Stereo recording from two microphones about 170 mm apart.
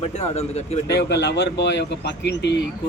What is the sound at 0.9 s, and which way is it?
Speech, 85° left.